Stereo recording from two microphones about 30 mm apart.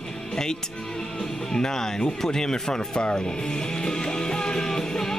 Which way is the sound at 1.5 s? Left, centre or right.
Left.